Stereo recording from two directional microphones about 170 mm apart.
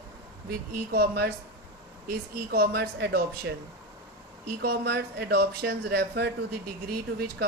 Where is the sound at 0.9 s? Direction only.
65° right (ahead or behind).